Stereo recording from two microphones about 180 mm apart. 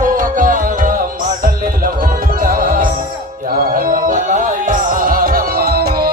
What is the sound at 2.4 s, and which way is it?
Music, 50° right (ahead or behind).